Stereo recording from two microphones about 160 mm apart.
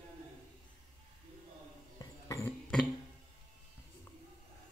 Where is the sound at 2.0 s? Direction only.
20° left (ahead or behind).